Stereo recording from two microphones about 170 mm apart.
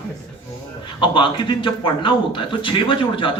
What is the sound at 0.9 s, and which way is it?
A man's voice, 30° left (ahead or behind).